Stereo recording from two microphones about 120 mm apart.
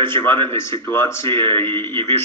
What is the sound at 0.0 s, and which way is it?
Speech, 20° left (ahead or behind).